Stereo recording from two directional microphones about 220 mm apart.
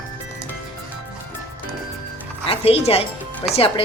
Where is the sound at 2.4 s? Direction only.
25° left (ahead or behind).